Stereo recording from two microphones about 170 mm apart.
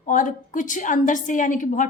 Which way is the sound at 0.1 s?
50° left (ahead or behind).